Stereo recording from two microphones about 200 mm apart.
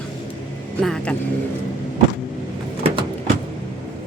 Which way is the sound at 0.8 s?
5° left (ahead or behind).